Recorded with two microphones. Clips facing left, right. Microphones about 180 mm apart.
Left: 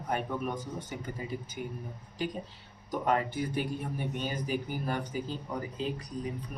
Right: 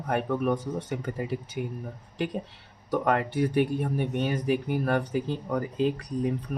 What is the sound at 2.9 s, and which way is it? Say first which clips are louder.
Speech: right 4 dB; 70° right (ahead or behind).